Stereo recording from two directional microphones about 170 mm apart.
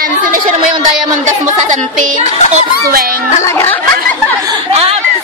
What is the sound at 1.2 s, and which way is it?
Speech, 45° right (ahead or behind).